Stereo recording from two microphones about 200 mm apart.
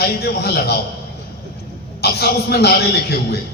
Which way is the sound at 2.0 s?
55° left (ahead or behind).